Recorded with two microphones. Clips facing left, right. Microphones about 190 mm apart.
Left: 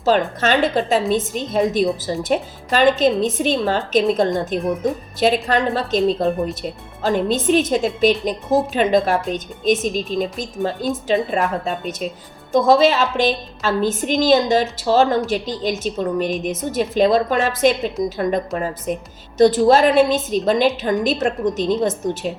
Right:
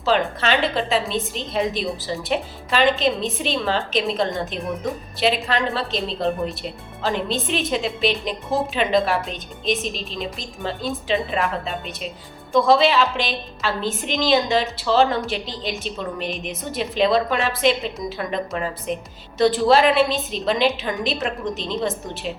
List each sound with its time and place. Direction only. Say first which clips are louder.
0.0 s a woman's voice: left 3 dB; 45° left (ahead or behind)